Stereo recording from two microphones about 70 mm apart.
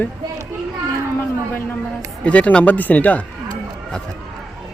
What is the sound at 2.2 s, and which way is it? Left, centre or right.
Speech, centre.